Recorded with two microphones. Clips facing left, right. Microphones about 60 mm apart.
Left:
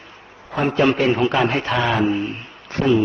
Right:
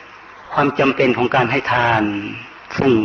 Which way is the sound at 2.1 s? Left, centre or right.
Right.